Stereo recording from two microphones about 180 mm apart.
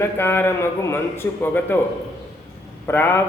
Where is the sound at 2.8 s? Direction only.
10° left (ahead or behind).